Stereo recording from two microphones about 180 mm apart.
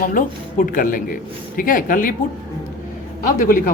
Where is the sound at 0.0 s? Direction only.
50° left (ahead or behind).